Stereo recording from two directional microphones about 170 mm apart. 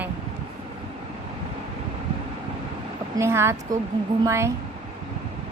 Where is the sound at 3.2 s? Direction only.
15° right (ahead or behind).